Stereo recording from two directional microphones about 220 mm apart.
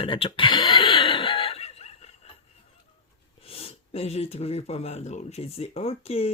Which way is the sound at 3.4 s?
25° left (ahead or behind).